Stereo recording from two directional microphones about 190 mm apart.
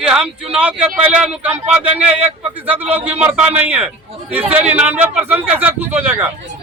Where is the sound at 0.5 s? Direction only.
10° right (ahead or behind).